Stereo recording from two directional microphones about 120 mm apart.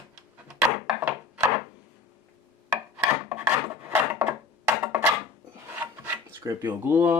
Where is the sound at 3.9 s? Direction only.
15° right (ahead or behind).